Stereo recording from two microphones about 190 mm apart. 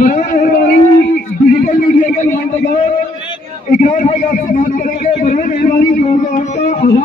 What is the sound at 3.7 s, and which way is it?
A man's voice, 45° left (ahead or behind).